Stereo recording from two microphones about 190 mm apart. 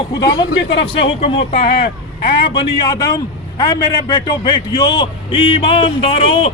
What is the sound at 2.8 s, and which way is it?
A man's voice, 20° left (ahead or behind).